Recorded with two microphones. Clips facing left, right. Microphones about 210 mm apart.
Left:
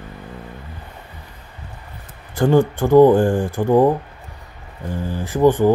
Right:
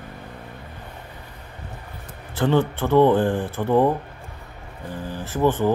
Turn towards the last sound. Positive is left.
turn(degrees=15)  # may be behind; listen again after turning